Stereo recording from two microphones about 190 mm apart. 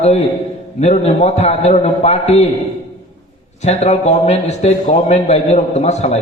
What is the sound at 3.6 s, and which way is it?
A man's voice, 35° left (ahead or behind).